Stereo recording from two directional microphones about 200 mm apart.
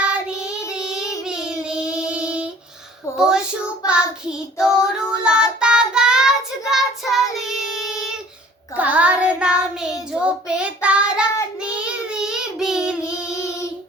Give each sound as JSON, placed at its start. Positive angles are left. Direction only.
{"t": 0.0, "sound": "child singing", "side_deg": -5}
{"t": 0.8, "sound": "child singing", "side_deg": 15}
{"t": 1.2, "sound": "child singing", "side_deg": -5}